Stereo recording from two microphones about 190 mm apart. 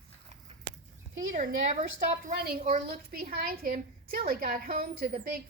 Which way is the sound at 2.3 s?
55° right (ahead or behind).